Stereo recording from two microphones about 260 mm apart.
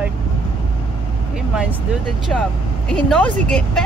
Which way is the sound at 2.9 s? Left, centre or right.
Centre.